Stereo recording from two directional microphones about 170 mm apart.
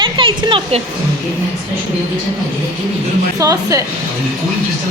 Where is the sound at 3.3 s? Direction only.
20° right (ahead or behind).